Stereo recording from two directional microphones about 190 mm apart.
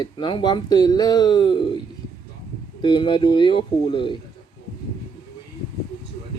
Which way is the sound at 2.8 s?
25° left (ahead or behind).